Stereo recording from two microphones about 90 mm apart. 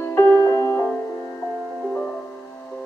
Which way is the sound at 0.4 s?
35° left (ahead or behind).